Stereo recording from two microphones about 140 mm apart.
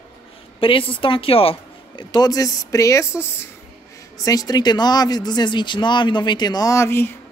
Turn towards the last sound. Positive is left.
turn(degrees=15)  # may be behind; listen again after turning